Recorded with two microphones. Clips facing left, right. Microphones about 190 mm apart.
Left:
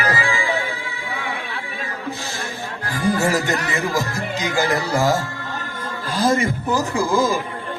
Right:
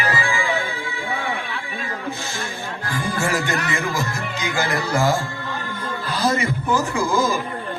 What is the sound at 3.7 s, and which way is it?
A man's voice, 40° left (ahead or behind).